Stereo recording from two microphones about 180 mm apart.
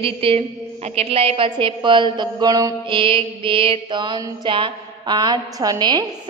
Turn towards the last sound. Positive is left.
turn(degrees=-20)  # may be behind; listen again after turning